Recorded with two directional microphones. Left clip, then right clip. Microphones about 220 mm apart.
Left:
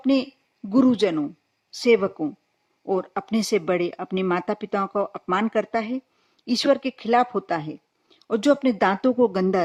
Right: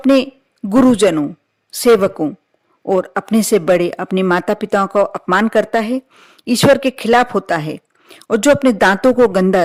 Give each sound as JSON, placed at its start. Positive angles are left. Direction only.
{"t": 0.0, "sound": "a woman's voice", "side_deg": -40}